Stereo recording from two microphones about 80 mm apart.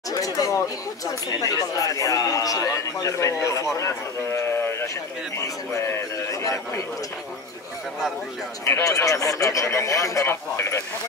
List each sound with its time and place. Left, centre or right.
0.1 s a man's voice: left
8.6 s speech: left